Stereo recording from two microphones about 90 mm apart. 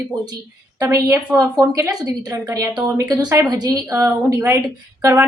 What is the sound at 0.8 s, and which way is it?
A woman's voice, 35° right (ahead or behind).